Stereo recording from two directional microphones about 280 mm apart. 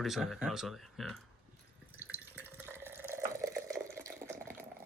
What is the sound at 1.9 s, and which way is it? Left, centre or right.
Drip, centre.